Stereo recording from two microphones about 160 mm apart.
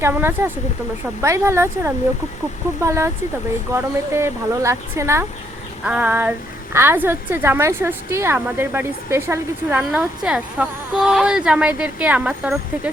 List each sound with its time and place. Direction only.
0.0 s a woman's voice: 15° right (ahead or behind)